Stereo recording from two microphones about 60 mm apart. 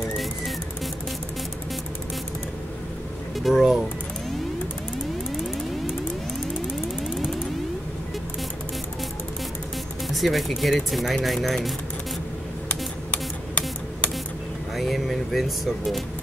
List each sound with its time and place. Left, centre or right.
3.3 s music: centre
6.7 s a sound: centre
10.0 s music: centre
10.6 s speech: centre
13.1 s music: left
14.8 s music: centre